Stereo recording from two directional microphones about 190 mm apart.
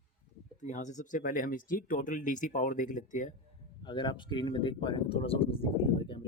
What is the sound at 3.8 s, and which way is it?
Speech, 25° left (ahead or behind).